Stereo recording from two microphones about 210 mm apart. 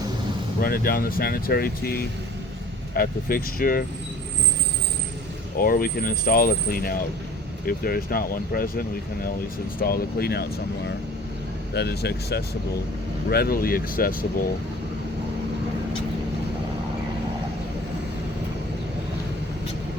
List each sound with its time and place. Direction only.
0.6 s speech: 45° left (ahead or behind)
5.5 s speech: 45° left (ahead or behind)
11.7 s speech: 50° left (ahead or behind)